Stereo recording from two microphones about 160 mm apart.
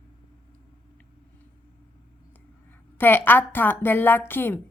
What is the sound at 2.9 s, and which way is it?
A woman's voice, 15° left (ahead or behind).